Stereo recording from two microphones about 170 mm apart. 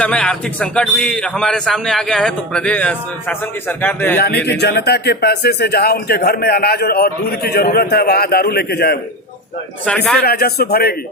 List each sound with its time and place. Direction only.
0.0 s a man's voice: 5° left (ahead or behind)
4.4 s speech: 80° left
9.8 s a man's voice: 5° left (ahead or behind)
10.2 s a man's voice: 65° left (ahead or behind)